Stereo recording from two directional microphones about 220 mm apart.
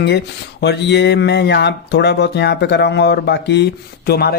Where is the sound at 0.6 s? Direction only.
50° left (ahead or behind).